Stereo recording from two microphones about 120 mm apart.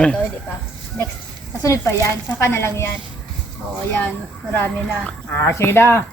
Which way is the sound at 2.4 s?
20° left (ahead or behind).